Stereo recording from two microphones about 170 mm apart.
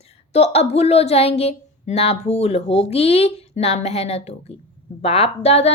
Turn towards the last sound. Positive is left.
turn(degrees=40)  # may be behind; listen again after turning